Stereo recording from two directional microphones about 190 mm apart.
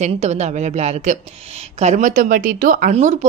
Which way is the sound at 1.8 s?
40° right (ahead or behind).